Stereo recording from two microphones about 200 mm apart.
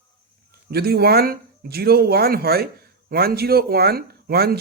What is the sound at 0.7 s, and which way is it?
Speech, 50° right (ahead or behind).